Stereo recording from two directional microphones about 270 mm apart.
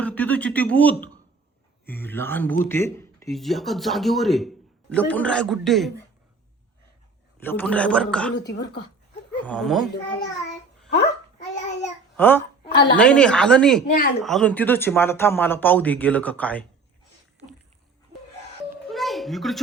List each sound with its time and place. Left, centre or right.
0.0 s speech: centre
7.3 s speech: centre
8.4 s speech: left
9.3 s speech: centre
9.8 s speech: left
12.1 s a child's voice: centre
13.9 s speech: left
14.2 s speech: centre
18.9 s music: centre